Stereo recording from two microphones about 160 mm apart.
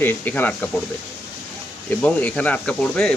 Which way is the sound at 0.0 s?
10° left (ahead or behind).